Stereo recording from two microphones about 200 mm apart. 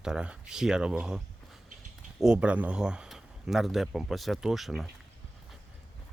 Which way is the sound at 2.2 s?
5° right (ahead or behind).